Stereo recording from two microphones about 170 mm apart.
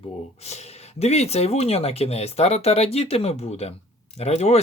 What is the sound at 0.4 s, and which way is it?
Speech, 40° left (ahead or behind).